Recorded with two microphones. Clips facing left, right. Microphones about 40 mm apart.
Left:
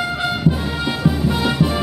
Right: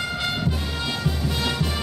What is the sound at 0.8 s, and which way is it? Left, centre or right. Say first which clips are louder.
Music: left 9 dB; centre.